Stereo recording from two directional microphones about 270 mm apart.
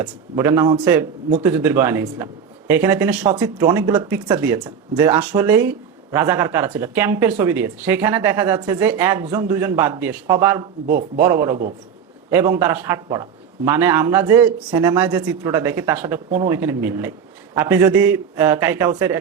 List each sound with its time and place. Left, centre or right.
0.0 s speech: centre